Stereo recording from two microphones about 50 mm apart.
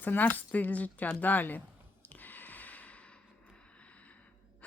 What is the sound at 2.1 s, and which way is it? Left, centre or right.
Gasp, left.